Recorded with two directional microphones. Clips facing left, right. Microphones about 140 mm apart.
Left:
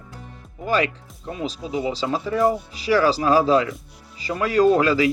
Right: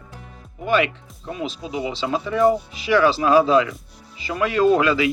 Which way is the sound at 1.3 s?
30° left (ahead or behind).